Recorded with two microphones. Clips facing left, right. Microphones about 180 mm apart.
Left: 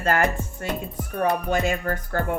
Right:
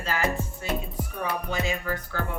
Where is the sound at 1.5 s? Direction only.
55° left (ahead or behind).